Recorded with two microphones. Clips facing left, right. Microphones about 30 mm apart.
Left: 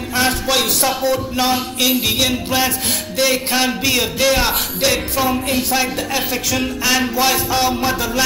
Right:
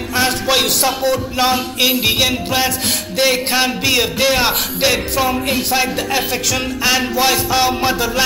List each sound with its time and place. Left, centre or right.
0.1 s speech: centre
7.5 s music: right